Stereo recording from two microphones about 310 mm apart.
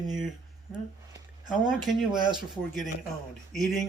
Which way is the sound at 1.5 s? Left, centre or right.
Centre.